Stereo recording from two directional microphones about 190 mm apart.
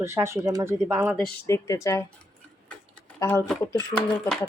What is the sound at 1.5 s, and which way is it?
Speech, 15° left (ahead or behind).